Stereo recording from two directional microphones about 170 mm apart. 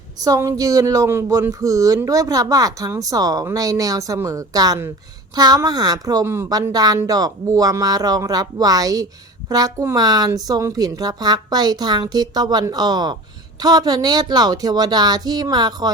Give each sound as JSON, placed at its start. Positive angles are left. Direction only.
{"t": 0.3, "sound": "speech", "side_deg": -20}